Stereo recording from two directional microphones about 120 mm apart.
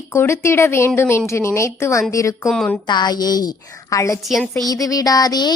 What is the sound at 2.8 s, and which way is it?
A woman's voice, 35° left (ahead or behind).